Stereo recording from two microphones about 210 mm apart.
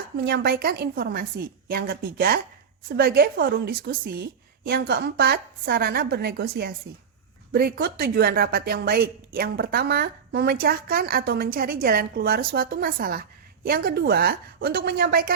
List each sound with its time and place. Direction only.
0.3 s speech: 50° right (ahead or behind)